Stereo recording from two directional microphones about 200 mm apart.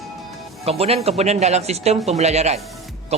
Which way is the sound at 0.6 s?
30° right (ahead or behind).